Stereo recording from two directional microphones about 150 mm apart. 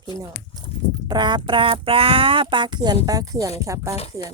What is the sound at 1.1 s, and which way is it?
Speech, 30° right (ahead or behind).